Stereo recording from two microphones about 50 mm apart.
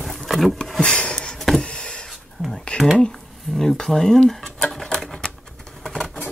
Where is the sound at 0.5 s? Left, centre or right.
Centre.